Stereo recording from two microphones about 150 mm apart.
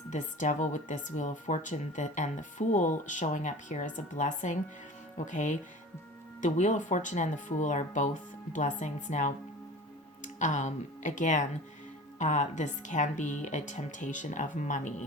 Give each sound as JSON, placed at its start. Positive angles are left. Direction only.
{"t": 0.1, "sound": "speech", "side_deg": 55}